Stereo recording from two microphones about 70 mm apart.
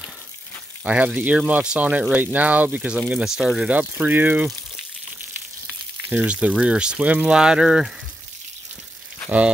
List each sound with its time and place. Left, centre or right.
0.8 s speech: right
3.3 s speech: centre
3.7 s speech: right
6.0 s speech: centre